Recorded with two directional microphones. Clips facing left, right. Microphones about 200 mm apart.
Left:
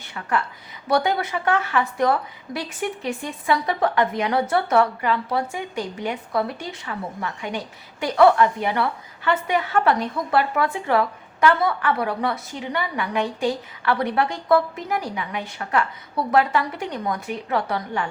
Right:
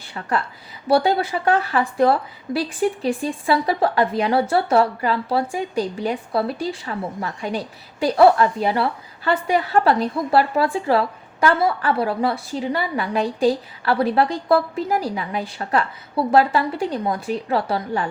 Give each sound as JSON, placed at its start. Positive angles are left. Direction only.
{"t": 0.0, "sound": "a woman's voice", "side_deg": -35}